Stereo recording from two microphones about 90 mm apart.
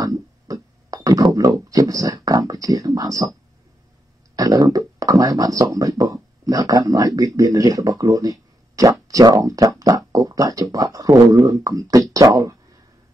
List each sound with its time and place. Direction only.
0.0 s music: 40° right (ahead or behind)
1.3 s speech: 40° right (ahead or behind)
4.4 s speech: 40° right (ahead or behind)